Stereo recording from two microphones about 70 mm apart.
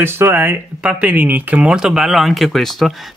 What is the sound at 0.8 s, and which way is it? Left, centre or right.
Speech, right.